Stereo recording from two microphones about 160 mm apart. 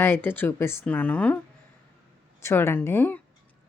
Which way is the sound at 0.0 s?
15° left (ahead or behind).